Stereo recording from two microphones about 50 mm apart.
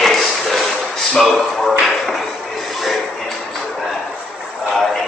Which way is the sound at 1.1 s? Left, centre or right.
Centre.